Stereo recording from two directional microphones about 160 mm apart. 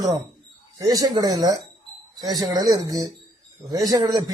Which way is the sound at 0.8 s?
25° right (ahead or behind).